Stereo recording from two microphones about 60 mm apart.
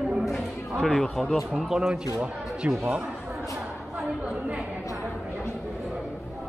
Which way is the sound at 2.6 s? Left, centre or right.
Right.